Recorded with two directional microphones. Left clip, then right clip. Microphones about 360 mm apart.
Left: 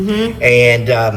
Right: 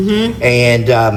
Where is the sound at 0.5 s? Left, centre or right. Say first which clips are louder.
Left 1 dB; centre.